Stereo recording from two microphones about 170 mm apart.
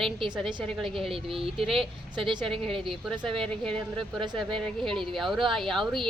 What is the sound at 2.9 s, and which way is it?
Speech, centre (ahead or behind).